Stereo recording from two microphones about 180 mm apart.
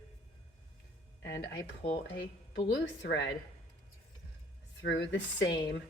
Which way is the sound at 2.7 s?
80° left.